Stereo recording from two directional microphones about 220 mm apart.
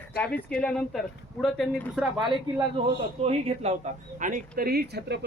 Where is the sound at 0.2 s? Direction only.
5° left (ahead or behind).